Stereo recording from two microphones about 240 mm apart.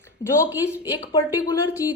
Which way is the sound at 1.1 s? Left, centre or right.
Centre.